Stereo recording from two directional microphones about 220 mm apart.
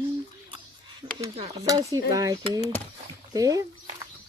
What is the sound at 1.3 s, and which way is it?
Speech, 20° right (ahead or behind).